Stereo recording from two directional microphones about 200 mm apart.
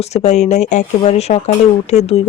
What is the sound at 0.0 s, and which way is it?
Speech, 35° left (ahead or behind).